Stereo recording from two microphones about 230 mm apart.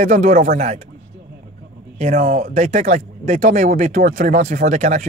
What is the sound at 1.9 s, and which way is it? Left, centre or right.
Speech, right.